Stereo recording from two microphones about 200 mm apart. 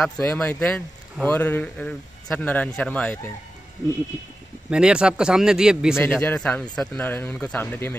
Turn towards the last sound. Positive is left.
turn(degrees=10)  # may be behind; listen again after turning